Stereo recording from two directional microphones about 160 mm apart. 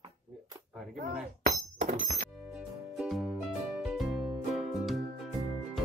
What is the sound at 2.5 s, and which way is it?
Music, 5° right (ahead or behind).